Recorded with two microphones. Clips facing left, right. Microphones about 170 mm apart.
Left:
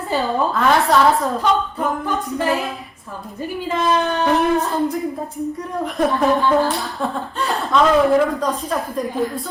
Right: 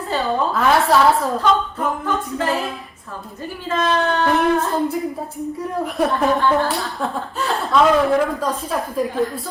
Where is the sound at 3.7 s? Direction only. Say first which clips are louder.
Even; 15° left (ahead or behind).